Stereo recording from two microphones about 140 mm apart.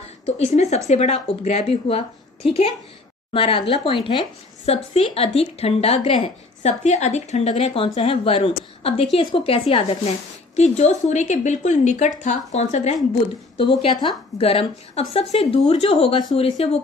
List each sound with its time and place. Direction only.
0.6 s speech: 50° left (ahead or behind)
13.8 s speech: 45° left (ahead or behind)